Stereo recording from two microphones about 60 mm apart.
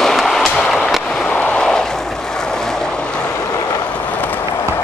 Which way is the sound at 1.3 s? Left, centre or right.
Centre.